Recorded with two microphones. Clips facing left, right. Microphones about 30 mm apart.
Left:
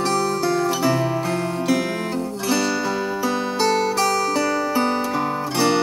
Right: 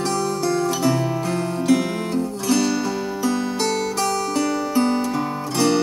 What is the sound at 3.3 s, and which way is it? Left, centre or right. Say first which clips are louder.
Music: left 1 dB; centre.